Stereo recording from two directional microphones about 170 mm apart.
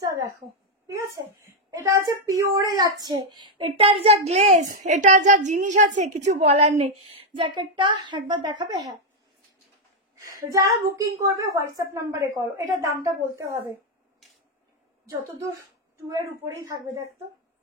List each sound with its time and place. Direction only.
0.0 s a sound: 20° right (ahead or behind)
1.4 s speech: 20° right (ahead or behind)
2.6 s child singing: 20° right (ahead or behind); by 6.9 s 40° right (ahead or behind)
7.3 s a woman's voice: 30° right (ahead or behind)
10.5 s a woman's voice: 20° right (ahead or behind)
16.1 s a woman's voice: 20° right (ahead or behind)